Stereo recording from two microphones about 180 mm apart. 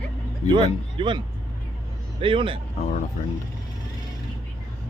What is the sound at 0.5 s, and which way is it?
Speech, 30° right (ahead or behind).